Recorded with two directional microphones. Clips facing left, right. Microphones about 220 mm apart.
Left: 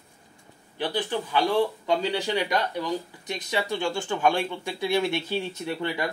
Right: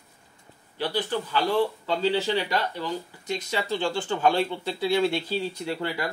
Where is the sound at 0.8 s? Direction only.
15° left (ahead or behind).